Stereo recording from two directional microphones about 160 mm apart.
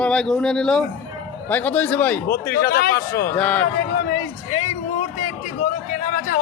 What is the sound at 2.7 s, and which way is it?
Speech, 70° left (ahead or behind).